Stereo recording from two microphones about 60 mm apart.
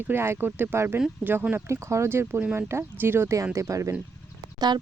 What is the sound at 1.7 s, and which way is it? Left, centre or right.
Speech, right.